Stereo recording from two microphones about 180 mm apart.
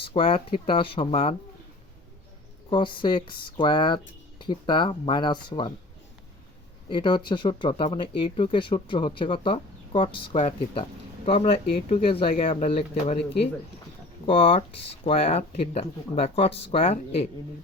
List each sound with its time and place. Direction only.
0.1 s speech: 30° left (ahead or behind)
2.6 s speech: 25° left (ahead or behind)
6.9 s speech: 25° left (ahead or behind)
14.3 s speech: 30° left (ahead or behind)